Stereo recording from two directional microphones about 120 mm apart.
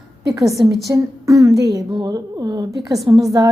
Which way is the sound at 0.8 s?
30° right (ahead or behind).